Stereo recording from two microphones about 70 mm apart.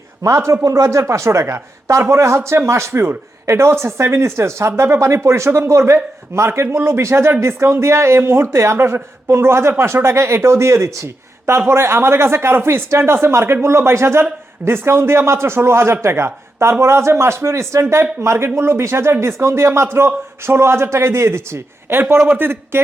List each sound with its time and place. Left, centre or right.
0.2 s speech: right